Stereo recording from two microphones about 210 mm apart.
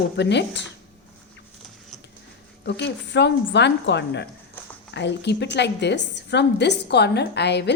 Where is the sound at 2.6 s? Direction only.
55° left (ahead or behind).